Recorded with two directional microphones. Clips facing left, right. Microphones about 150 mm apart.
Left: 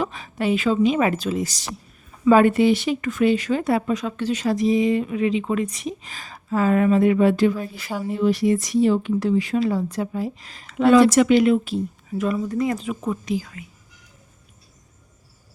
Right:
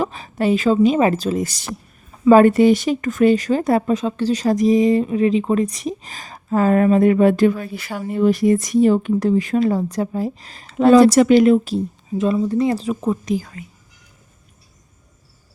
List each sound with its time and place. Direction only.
0.0 s a sound: 40° right (ahead or behind)
0.9 s speech: 35° right (ahead or behind); by 1.7 s 55° right (ahead or behind)
2.2 s speech: 40° right (ahead or behind); by 7.9 s 65° right (ahead or behind)
8.0 s speech: 50° right (ahead or behind)
12.1 s speech: 25° right (ahead or behind); by 13.7 s 40° right (ahead or behind)